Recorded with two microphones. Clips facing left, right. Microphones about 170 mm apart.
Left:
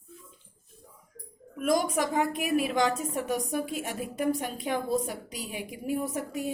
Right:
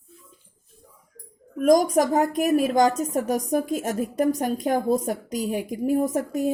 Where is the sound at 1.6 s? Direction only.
40° right (ahead or behind).